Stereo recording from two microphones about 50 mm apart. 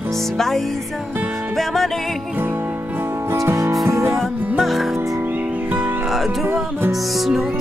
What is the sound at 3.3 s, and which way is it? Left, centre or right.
Music, right.